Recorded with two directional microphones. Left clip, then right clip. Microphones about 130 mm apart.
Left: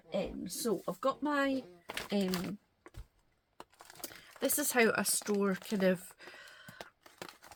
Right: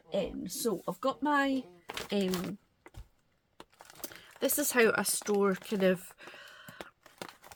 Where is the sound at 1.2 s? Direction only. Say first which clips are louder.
Right 4 dB; 90° right.